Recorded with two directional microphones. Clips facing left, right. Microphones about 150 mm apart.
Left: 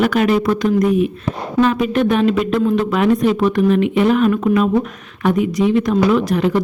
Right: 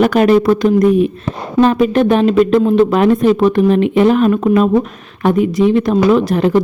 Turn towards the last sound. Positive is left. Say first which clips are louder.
# right 4 dB
turn(degrees=-30)  # may be behind; listen again after turning